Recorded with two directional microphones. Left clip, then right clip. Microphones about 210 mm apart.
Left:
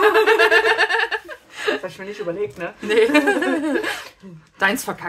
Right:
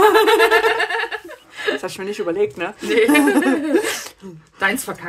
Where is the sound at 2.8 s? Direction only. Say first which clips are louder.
Right 1 dB; 15° left (ahead or behind).